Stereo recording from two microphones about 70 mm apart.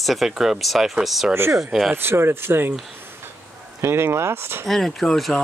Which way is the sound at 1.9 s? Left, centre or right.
Right.